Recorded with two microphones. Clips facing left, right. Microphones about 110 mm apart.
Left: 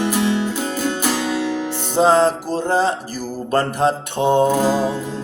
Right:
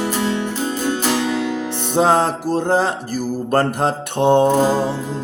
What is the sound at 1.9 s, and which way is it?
Music, 60° right (ahead or behind).